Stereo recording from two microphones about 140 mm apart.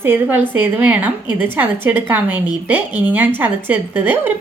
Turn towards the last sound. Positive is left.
turn(degrees=-15)  # may be behind; listen again after turning